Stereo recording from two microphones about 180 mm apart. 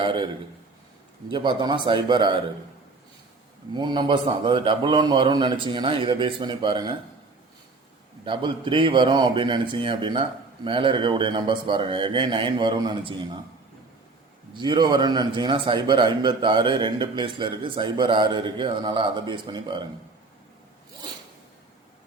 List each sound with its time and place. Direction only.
0.0 s a man's voice: 25° right (ahead or behind)
1.3 s a man's voice: 25° right (ahead or behind)
3.8 s a man's voice: 25° right (ahead or behind)
8.2 s a man's voice: 25° right (ahead or behind)
14.6 s a man's voice: 25° right (ahead or behind)